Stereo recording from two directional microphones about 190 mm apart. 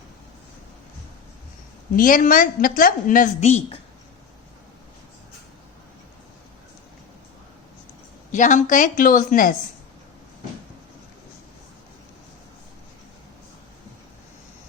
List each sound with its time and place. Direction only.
2.0 s a woman's voice: 45° left (ahead or behind)
8.3 s a woman's voice: 40° left (ahead or behind)